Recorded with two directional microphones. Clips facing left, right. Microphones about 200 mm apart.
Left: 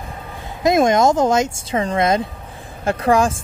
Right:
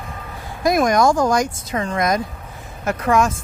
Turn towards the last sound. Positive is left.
turn(degrees=30)  # may be behind; listen again after turning